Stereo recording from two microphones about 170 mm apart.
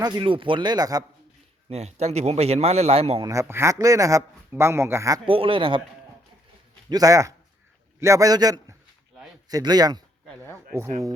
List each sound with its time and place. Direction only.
0.0 s speech: 25° right (ahead or behind)
1.7 s speech: 40° right (ahead or behind)
3.2 s a man's voice: 15° right (ahead or behind)
5.2 s speech: 30° right (ahead or behind)
6.9 s speech: 20° right (ahead or behind)
10.2 s speech: 10° left (ahead or behind)